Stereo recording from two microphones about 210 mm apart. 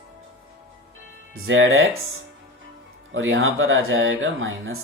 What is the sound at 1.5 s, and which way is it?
Speech, 65° right (ahead or behind).